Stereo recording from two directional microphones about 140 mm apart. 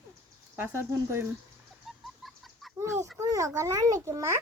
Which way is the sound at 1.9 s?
Centre (ahead or behind).